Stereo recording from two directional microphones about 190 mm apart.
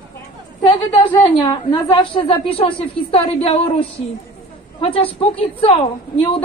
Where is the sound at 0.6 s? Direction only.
25° left (ahead or behind).